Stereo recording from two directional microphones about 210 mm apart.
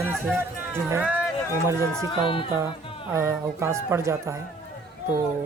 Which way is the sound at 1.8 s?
20° left (ahead or behind).